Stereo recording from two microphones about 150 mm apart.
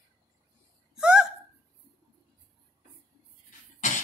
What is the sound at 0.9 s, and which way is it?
Hiccup, 5° right (ahead or behind).